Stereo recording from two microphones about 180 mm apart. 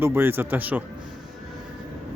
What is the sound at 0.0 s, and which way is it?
Speech, 10° right (ahead or behind).